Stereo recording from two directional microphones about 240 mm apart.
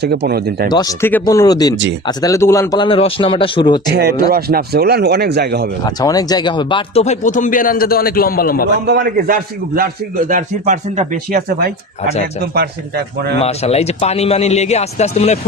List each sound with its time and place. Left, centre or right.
0.0 s a man's voice: right
0.7 s a man's voice: centre
3.9 s a man's voice: right
5.8 s speech: centre; by 8.6 s left
8.9 s a man's voice: right
13.4 s a man's voice: left